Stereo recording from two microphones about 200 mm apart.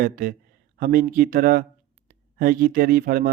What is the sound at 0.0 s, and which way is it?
Speech, 45° right (ahead or behind).